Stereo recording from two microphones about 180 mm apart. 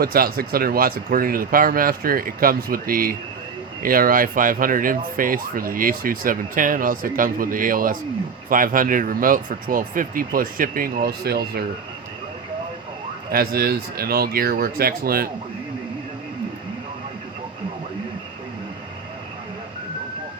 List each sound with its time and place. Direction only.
0.0 s speech: 55° right (ahead or behind)
13.3 s speech: 60° right (ahead or behind)